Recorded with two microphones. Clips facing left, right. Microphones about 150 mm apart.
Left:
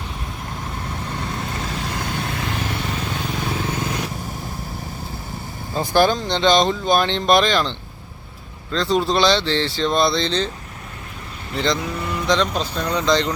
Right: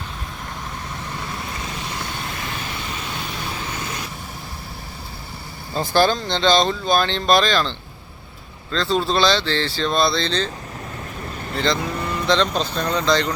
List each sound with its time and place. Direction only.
5.7 s speech: 15° left (ahead or behind)
11.5 s speech: 20° left (ahead or behind)